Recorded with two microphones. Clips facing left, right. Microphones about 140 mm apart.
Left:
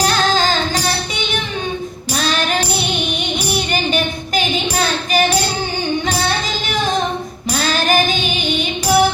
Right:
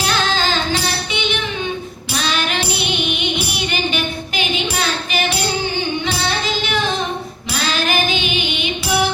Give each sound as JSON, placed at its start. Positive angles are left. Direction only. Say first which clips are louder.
{"t": 0.0, "sound": "music", "louder": "left 3 dB", "side_deg": 40}
{"t": 7.7, "sound": "music", "louder": "left 3 dB", "side_deg": 40}